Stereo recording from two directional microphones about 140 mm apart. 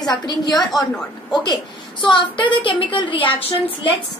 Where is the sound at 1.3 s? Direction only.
30° left (ahead or behind).